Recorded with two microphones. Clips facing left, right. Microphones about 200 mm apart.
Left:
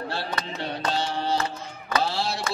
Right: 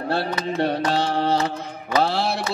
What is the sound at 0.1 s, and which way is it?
Mantra, 60° right (ahead or behind).